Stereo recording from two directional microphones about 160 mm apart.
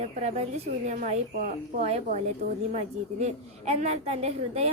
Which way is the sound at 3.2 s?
45° right (ahead or behind).